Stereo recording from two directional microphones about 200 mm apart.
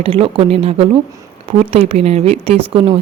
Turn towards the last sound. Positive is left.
turn(degrees=-25)  # may be behind; listen again after turning